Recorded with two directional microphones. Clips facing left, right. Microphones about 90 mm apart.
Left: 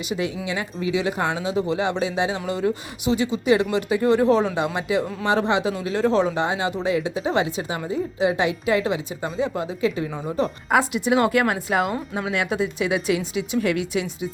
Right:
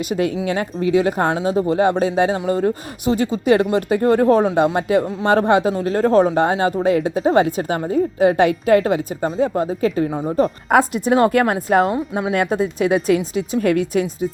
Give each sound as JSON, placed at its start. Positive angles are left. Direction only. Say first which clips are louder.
{"t": 0.0, "sound": "speech", "louder": "right 6 dB", "side_deg": -50}
{"t": 10.1, "sound": "speech", "louder": "right 6 dB", "side_deg": -20}
{"t": 10.3, "sound": "speech", "louder": "right 5 dB", "side_deg": -45}